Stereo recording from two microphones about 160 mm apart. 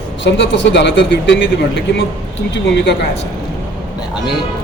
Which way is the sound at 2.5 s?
90° left.